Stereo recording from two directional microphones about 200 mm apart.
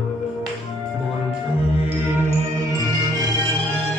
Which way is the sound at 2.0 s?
10° right (ahead or behind).